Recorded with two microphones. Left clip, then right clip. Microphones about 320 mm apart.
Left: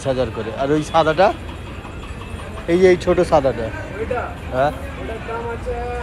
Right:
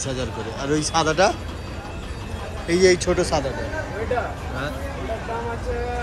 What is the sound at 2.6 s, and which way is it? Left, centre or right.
Speech, centre.